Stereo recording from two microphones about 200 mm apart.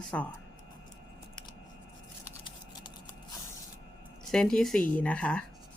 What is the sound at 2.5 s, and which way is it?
Scissors, 25° left (ahead or behind).